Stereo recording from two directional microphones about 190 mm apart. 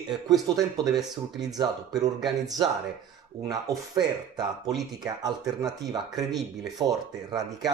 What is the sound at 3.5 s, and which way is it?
Speech, 20° right (ahead or behind).